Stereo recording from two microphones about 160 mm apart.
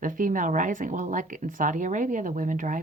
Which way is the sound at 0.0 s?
55° right (ahead or behind).